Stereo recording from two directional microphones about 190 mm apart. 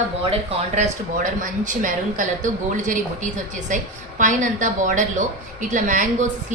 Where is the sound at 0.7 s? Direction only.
40° right (ahead or behind).